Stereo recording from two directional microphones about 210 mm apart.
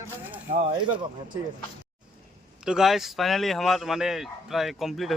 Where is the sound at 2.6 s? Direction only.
Centre (ahead or behind).